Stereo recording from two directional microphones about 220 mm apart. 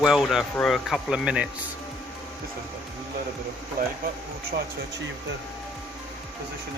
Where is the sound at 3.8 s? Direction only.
40° right (ahead or behind).